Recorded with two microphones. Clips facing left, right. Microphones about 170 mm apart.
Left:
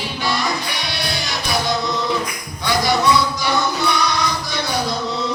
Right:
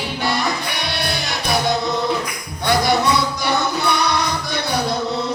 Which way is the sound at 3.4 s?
60° right (ahead or behind).